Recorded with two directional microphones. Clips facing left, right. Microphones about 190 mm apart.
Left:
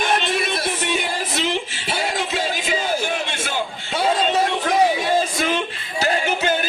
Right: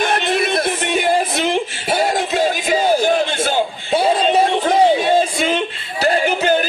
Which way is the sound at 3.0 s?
35° right (ahead or behind).